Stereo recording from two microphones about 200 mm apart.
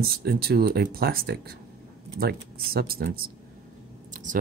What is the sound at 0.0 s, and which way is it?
Speech, 50° right (ahead or behind).